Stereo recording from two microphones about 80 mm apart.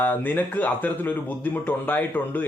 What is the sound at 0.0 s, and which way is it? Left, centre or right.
A man's voice, left.